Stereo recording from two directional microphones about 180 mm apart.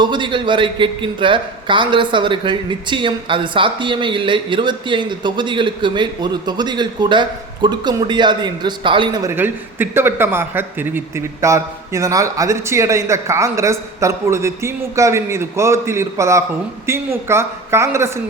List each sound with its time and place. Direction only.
0.0 s a man's voice: 25° right (ahead or behind)
9.3 s a man's voice: 10° right (ahead or behind)